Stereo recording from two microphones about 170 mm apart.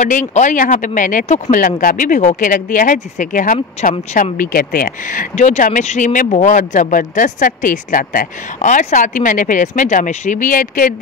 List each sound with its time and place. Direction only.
0.0 s speech: 45° left (ahead or behind)
3.8 s speech: 40° left (ahead or behind)
4.1 s speech: 55° left (ahead or behind)